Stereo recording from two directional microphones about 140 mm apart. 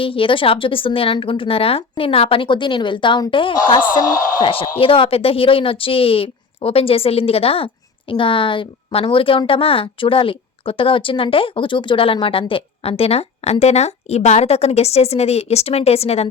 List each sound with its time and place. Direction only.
0.0 s a woman's voice: 40° left (ahead or behind)